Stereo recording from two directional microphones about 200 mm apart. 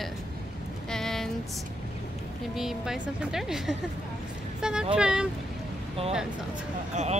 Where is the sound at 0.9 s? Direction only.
Centre (ahead or behind).